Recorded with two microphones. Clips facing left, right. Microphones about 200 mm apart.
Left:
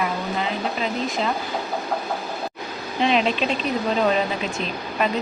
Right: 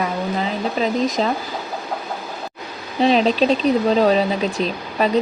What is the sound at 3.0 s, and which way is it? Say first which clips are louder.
Speech: right 5 dB; 35° right (ahead or behind).